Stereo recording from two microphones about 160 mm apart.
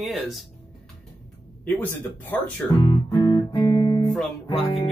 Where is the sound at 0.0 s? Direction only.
Centre (ahead or behind).